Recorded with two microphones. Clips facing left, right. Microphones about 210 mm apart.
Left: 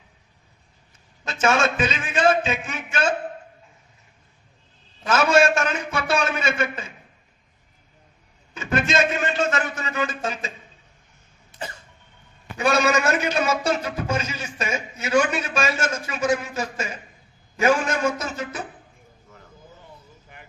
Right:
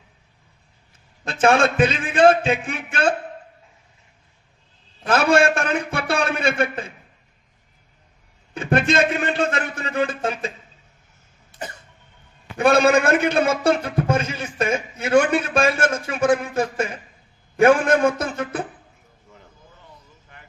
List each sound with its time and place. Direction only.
1.2 s a man's voice: 55° right (ahead or behind)
5.0 s a man's voice: 60° right (ahead or behind)
8.5 s a man's voice: 60° right (ahead or behind)
12.5 s a man's voice: 55° right (ahead or behind)